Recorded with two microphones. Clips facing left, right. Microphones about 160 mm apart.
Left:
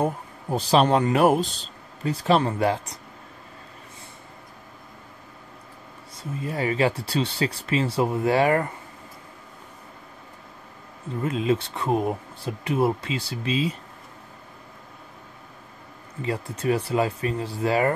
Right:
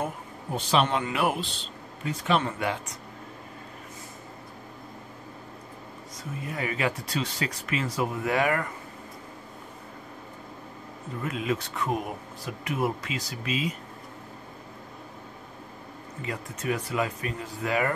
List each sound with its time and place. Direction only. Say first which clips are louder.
0.0 s speech: left 7 dB; 35° left (ahead or behind)
6.4 s speech: left 6 dB; 30° left (ahead or behind)
11.2 s speech: left 6 dB; 30° left (ahead or behind)
16.2 s speech: left 7 dB; 30° left (ahead or behind)